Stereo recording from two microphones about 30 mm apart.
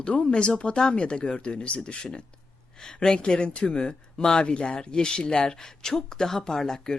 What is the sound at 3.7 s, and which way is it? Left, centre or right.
Speech, left.